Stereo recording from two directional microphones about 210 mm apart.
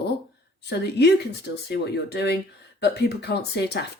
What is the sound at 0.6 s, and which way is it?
Speech, 55° left (ahead or behind).